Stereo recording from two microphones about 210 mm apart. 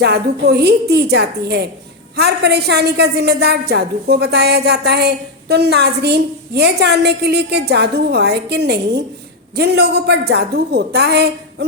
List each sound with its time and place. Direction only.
0.0 s a woman's voice: 50° right (ahead or behind)